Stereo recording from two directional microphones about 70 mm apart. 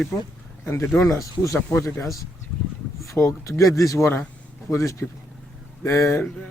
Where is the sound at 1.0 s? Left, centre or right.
Left.